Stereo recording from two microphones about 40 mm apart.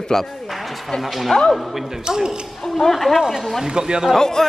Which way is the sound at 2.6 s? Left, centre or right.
Centre.